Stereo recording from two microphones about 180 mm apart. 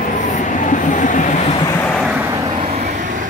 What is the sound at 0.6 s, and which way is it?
Train, 45° left (ahead or behind).